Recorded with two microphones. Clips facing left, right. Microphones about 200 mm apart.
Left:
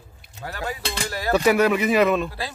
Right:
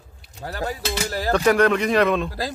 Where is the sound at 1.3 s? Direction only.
5° left (ahead or behind).